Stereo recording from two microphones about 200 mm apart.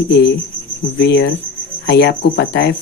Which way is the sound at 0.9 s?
60° left (ahead or behind).